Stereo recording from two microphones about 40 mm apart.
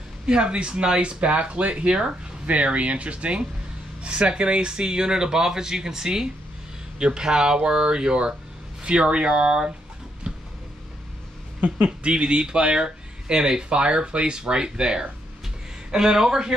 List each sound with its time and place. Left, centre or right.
0.3 s speech: right
2.4 s speech: right
10.3 s a sound: right
11.6 s speech: right; by 16.5 s centre